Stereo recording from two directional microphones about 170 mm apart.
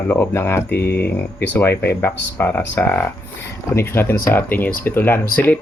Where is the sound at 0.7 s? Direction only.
70° left (ahead or behind).